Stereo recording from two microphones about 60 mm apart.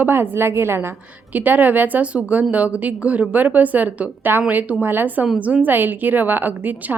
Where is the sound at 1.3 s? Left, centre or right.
Right.